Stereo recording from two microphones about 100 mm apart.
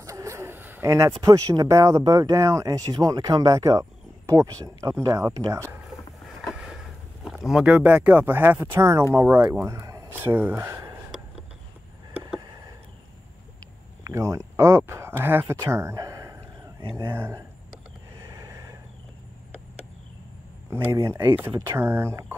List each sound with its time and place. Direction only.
0.0 s a sound: 30° right (ahead or behind)
1.2 s speech: 35° right (ahead or behind)
6.4 s a sound: 5° right (ahead or behind)
7.2 s speech: 5° right (ahead or behind); by 10.9 s 25° right (ahead or behind)
14.0 s speech: 30° right (ahead or behind)
15.7 s a sound: 30° right (ahead or behind)
16.9 s speech: 25° right (ahead or behind)
18.3 s vehicle: 30° right (ahead or behind)
20.7 s speech: 25° right (ahead or behind)